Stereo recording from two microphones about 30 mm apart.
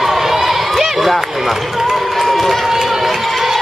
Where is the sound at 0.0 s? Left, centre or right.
Centre.